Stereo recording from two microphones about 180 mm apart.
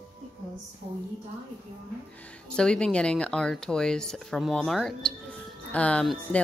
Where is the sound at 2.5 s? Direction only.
5° left (ahead or behind).